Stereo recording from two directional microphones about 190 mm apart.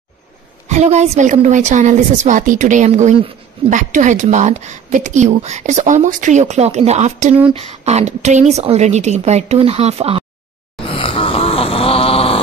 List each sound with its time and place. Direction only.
0.7 s speech: 35° right (ahead or behind)
10.8 s groan: 30° left (ahead or behind)